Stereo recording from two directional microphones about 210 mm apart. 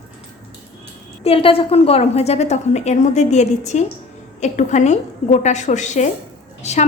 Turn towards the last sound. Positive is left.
turn(degrees=30)  # may be behind; listen again after turning